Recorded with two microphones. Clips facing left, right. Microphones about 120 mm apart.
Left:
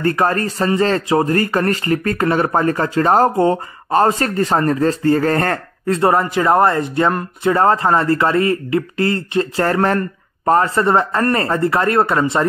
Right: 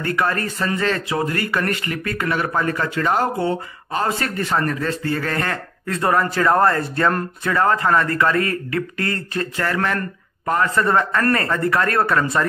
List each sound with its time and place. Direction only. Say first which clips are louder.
0.0 s speech: left 5 dB; 40° left (ahead or behind)
5.9 s speech: left 4 dB; 25° left (ahead or behind)
9.6 s speech: left 5 dB; 35° left (ahead or behind)